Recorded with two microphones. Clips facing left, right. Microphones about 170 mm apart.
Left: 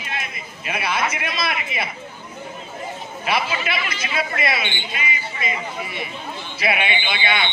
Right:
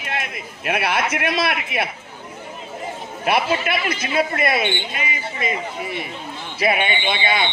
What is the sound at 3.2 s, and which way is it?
A man's voice, 55° right (ahead or behind).